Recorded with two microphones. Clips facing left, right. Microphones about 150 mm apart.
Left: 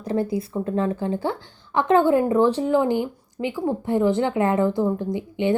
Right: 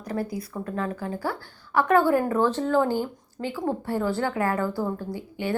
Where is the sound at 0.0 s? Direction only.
25° left (ahead or behind).